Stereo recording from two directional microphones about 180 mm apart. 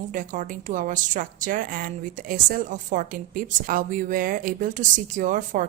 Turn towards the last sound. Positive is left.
turn(degrees=-45)  # may be behind; listen again after turning